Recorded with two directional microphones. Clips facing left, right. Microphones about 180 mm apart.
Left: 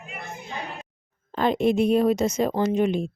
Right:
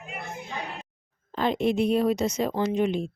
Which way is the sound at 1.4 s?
50° left (ahead or behind).